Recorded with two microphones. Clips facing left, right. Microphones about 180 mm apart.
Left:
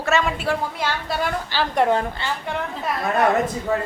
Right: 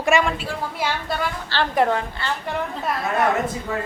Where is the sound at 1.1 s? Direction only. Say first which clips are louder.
Left 1 dB; 5° left (ahead or behind).